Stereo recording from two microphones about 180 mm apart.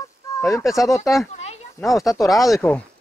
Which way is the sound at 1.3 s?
35° left (ahead or behind).